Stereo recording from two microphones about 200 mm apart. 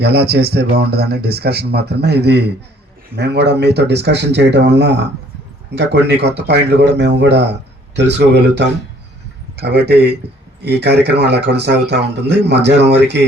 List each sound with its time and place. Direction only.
0.0 s speech: 55° right (ahead or behind)